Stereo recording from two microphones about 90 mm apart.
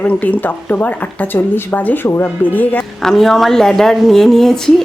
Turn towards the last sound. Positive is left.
turn(degrees=5)  # may be behind; listen again after turning